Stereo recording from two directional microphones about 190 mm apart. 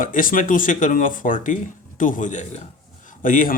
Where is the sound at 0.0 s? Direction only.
45° left (ahead or behind).